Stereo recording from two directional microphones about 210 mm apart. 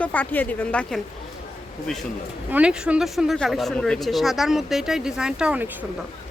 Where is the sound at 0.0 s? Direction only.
10° left (ahead or behind).